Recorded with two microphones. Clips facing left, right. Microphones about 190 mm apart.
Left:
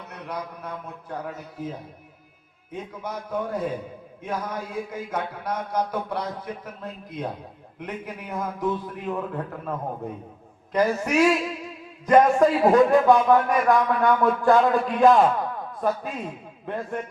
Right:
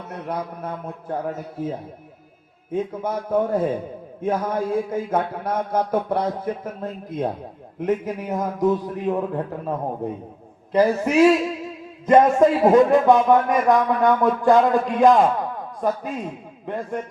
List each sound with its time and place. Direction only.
0.1 s a man's voice: 50° right (ahead or behind)
2.7 s a man's voice: 50° right (ahead or behind); by 17.0 s 15° right (ahead or behind)